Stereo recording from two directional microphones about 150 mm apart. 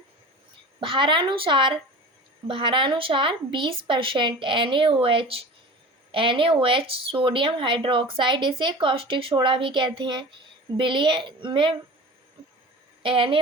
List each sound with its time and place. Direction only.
0.8 s speech: 35° right (ahead or behind)
13.0 s a woman's voice: 35° right (ahead or behind)